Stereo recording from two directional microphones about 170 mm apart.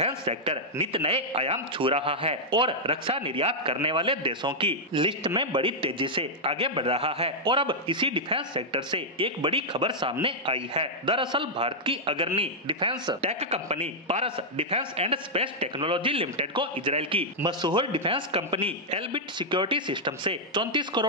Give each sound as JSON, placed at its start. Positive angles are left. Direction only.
{"t": 0.0, "sound": "a man's voice", "side_deg": -35}